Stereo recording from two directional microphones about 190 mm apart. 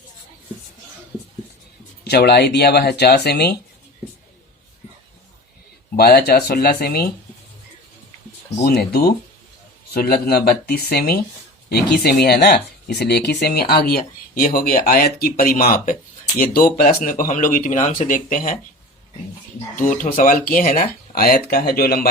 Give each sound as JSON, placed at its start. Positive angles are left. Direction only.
{"t": 2.0, "sound": "speech", "side_deg": 60}
{"t": 6.0, "sound": "speech", "side_deg": 55}
{"t": 8.6, "sound": "speech", "side_deg": 55}
{"t": 19.7, "sound": "speech", "side_deg": 45}